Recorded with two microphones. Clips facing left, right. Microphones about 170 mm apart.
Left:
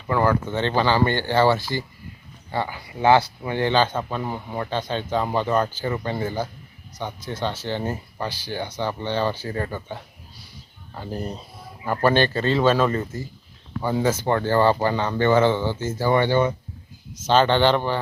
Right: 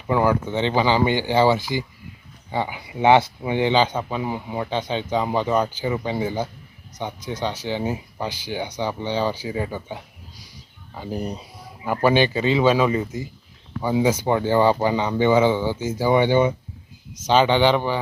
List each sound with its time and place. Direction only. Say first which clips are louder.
0.1 s speech: right 1 dB; 15° right (ahead or behind)